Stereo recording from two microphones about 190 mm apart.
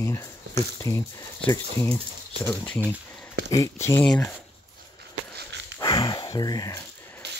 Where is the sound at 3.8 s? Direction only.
10° left (ahead or behind).